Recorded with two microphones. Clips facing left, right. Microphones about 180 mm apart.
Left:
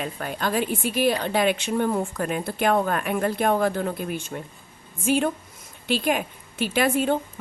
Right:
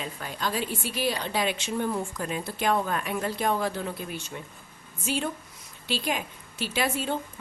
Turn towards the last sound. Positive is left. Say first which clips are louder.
# left 7 dB
turn(degrees=55)  # may be behind; listen again after turning